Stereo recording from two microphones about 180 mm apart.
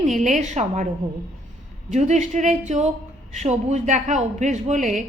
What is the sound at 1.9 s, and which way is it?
Speech, 40° right (ahead or behind).